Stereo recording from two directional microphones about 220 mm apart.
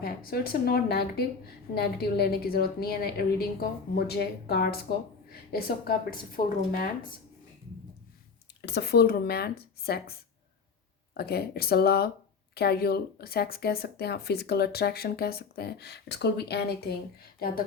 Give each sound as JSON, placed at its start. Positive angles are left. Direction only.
{"t": 0.0, "sound": "a woman's voice", "side_deg": 45}
{"t": 8.6, "sound": "a woman's voice", "side_deg": 50}